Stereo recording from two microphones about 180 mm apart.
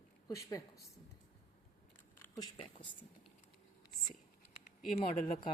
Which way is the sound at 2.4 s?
25° left (ahead or behind).